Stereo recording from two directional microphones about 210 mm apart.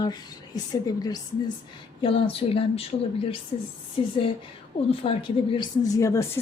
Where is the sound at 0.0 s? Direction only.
20° left (ahead or behind).